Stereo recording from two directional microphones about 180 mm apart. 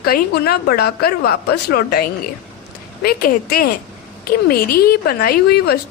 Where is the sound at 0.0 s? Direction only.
60° left (ahead or behind).